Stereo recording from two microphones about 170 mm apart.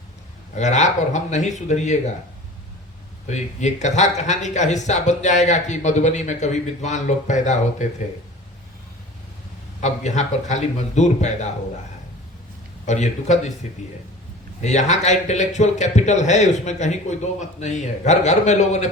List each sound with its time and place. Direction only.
0.5 s speech: 45° left (ahead or behind)
3.2 s speech: 45° left (ahead or behind)
9.8 s speech: 45° left (ahead or behind)
12.8 s speech: 45° left (ahead or behind)